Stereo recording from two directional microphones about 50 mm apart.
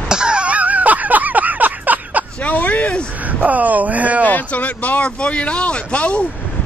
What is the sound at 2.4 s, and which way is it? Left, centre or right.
Speech, left.